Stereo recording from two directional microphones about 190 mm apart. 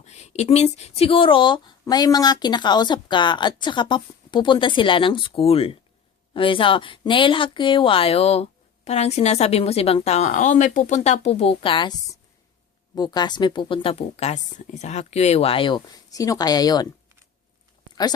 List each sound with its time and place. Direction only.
0.0 s a woman's voice: 35° left (ahead or behind)
13.0 s speech: 20° left (ahead or behind)